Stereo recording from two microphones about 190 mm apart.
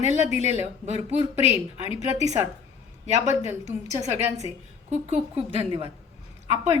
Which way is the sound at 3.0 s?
35° right (ahead or behind).